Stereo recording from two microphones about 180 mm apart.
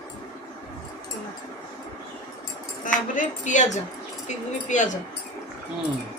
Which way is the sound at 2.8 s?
45° left (ahead or behind).